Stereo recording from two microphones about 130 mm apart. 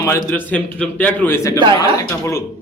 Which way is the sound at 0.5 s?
10° left (ahead or behind).